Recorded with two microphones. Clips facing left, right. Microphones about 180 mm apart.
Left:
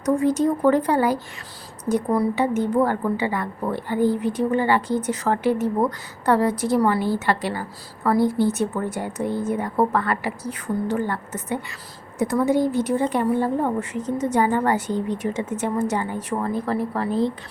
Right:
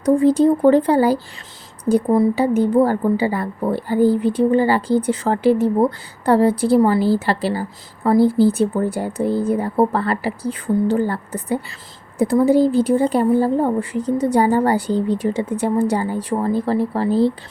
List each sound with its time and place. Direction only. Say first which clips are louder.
0.0 s a woman's voice: right 6 dB; 30° right (ahead or behind)